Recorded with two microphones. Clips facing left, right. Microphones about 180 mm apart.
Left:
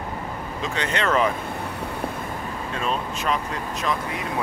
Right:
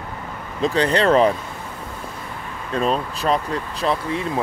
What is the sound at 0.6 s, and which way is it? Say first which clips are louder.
Speech: right 9 dB; 35° right (ahead or behind).